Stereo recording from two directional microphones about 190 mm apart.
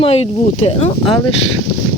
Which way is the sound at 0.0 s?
30° left (ahead or behind).